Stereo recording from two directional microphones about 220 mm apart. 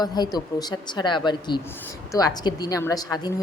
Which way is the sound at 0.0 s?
20° left (ahead or behind).